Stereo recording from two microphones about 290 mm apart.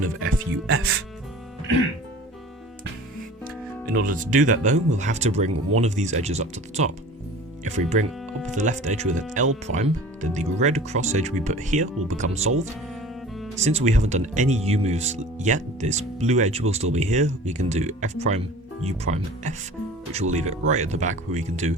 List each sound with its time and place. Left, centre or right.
0.2 s speech: right
3.9 s speech: right
13.6 s speech: right